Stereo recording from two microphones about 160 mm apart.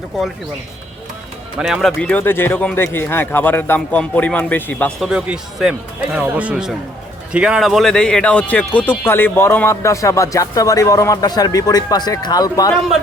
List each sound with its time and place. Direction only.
1.5 s speech: centre (ahead or behind)
4.9 s speech: 5° right (ahead or behind); by 12.7 s 25° left (ahead or behind)